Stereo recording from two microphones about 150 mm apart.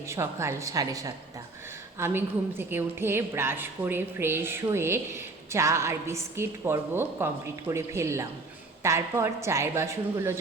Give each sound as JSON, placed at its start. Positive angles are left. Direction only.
{"t": 0.1, "sound": "a woman's voice", "side_deg": -20}